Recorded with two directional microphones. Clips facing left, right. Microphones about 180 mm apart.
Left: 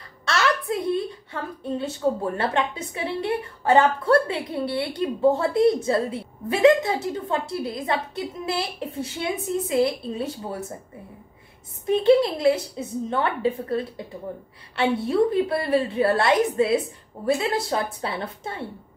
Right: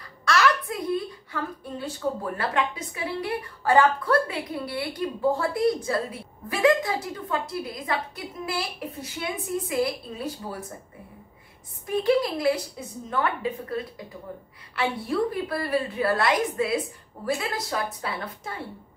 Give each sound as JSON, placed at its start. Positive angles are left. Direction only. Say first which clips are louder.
{"t": 0.2, "sound": "a woman's voice", "louder": "right 1 dB", "side_deg": 25}
{"t": 11.8, "sound": "a woman's voice", "louder": "left 5 dB", "side_deg": 25}